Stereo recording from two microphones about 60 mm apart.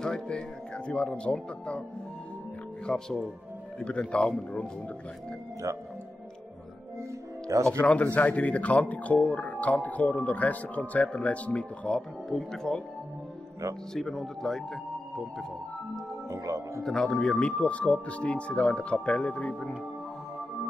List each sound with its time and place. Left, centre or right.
0.0 s speech: centre
2.9 s speech: centre
7.0 s speech: right
7.6 s speech: left
12.3 s speech: centre
13.9 s speech: centre
16.3 s speech: right
16.8 s speech: centre